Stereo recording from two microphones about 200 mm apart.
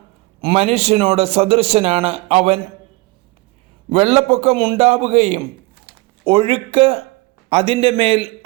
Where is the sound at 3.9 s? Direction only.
30° right (ahead or behind).